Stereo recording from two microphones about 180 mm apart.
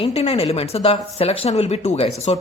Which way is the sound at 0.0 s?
35° left (ahead or behind).